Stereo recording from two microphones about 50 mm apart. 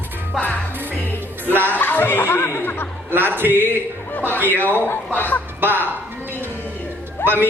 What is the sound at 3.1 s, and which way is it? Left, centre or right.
Speech, right.